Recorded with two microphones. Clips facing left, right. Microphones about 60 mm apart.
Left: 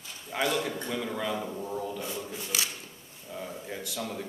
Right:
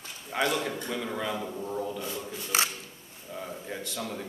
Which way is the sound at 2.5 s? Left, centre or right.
Right.